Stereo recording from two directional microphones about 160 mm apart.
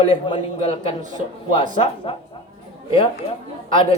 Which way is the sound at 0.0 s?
35° left (ahead or behind).